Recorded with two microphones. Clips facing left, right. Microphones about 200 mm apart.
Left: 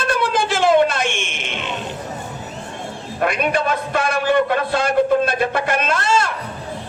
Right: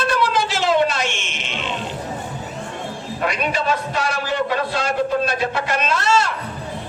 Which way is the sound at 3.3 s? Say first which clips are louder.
Left 2 dB; 55° left (ahead or behind).